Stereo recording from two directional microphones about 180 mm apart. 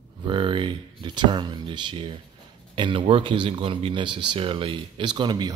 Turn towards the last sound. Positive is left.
turn(degrees=-25)  # may be behind; listen again after turning